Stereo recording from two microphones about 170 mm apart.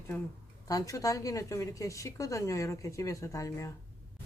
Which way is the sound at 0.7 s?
20° left (ahead or behind).